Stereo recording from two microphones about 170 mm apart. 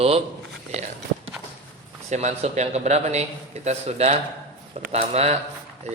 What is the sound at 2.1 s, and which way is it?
A man's voice, 40° right (ahead or behind).